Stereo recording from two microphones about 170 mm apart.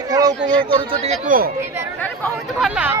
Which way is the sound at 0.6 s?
30° right (ahead or behind).